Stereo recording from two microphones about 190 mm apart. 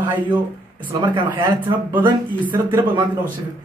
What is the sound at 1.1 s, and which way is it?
Speech, 25° right (ahead or behind).